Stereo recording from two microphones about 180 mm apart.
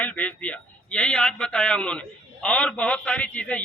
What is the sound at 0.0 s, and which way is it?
A man's voice, 10° left (ahead or behind).